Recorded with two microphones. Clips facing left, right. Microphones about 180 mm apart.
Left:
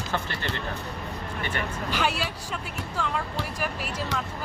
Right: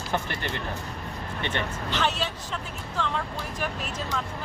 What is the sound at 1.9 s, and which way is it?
Speech, 10° left (ahead or behind).